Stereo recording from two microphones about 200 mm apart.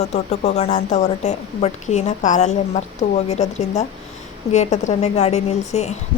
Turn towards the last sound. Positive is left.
turn(degrees=35)  # may be behind; listen again after turning